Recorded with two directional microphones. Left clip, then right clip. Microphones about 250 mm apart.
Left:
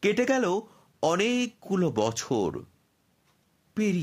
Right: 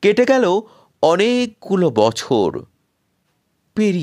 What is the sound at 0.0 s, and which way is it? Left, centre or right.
Speech, right.